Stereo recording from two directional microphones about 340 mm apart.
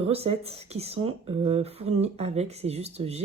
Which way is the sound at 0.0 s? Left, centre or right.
Centre.